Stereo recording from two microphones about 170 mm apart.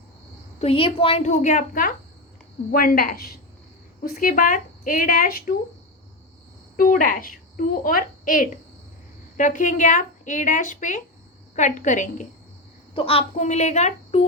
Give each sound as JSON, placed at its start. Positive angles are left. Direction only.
{"t": 0.6, "sound": "a woman's voice", "side_deg": 35}
{"t": 6.7, "sound": "a child's voice", "side_deg": 55}
{"t": 12.9, "sound": "a child's voice", "side_deg": 35}